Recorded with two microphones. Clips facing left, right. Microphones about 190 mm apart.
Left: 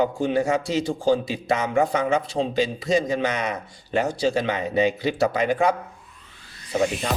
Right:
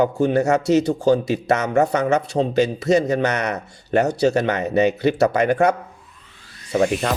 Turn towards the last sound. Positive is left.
turn(degrees=-65)  # may be behind; listen again after turning